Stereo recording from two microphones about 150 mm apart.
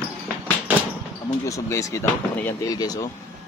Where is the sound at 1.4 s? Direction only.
20° left (ahead or behind).